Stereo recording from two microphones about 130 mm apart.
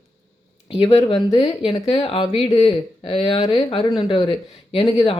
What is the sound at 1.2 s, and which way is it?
Speech, 45° left (ahead or behind).